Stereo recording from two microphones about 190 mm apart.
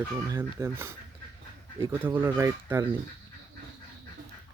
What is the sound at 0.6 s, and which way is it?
Speech, 15° right (ahead or behind).